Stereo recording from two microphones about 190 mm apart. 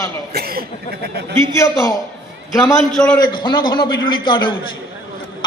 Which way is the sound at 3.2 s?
20° left (ahead or behind).